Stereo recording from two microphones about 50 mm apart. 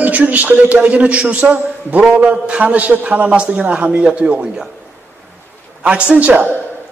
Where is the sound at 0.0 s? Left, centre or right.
Right.